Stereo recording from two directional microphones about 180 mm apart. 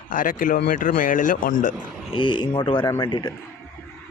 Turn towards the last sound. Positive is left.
turn(degrees=25)  # may be behind; listen again after turning